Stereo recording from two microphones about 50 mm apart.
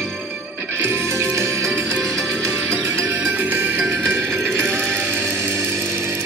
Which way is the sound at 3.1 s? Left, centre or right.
Right.